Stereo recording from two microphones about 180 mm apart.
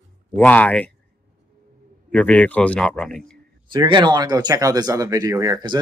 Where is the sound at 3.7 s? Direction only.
25° right (ahead or behind).